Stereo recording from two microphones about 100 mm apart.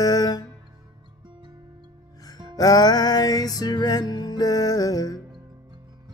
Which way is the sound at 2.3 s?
40° left (ahead or behind).